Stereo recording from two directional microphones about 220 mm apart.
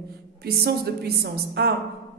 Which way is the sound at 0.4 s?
45° right (ahead or behind).